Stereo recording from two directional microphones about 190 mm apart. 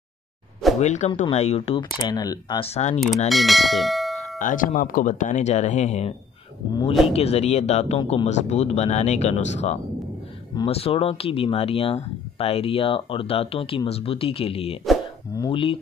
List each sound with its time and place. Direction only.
0.7 s speech: 35° left (ahead or behind); by 2.7 s 20° left (ahead or behind)
2.7 s speech: 35° left (ahead or behind)
3.3 s bell: centre (ahead or behind)
4.4 s speech: 45° left (ahead or behind); by 15.8 s 25° left (ahead or behind)